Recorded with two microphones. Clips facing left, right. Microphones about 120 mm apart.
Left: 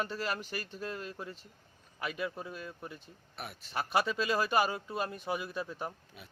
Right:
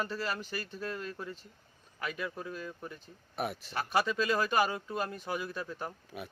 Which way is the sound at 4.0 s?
10° left (ahead or behind).